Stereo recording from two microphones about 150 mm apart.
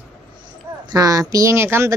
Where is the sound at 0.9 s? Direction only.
25° right (ahead or behind).